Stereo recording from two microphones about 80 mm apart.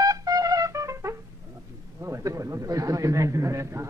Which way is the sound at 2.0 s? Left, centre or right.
Right.